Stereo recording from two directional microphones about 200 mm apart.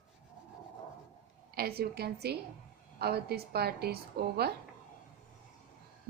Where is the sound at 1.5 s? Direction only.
50° right (ahead or behind).